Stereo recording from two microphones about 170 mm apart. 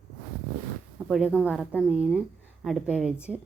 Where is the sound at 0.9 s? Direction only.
5° right (ahead or behind).